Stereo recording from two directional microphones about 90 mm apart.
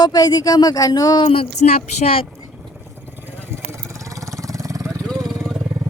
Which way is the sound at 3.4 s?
25° right (ahead or behind).